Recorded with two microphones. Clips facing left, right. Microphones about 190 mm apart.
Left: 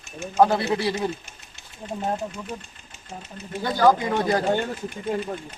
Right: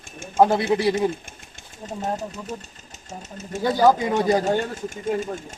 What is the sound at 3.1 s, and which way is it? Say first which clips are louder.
Speech: right 2 dB; 45° right (ahead or behind).